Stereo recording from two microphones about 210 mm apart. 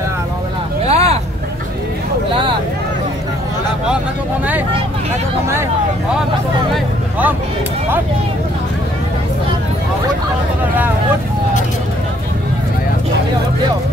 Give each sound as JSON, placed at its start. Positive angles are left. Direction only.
{"t": 0.8, "sound": "vehicle", "side_deg": -30}